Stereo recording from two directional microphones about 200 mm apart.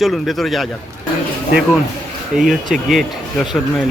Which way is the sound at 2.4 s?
Centre (ahead or behind).